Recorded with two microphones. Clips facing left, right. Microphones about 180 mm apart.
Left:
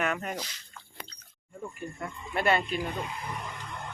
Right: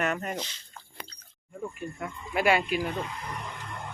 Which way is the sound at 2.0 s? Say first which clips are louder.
Right 2 dB; 10° right (ahead or behind).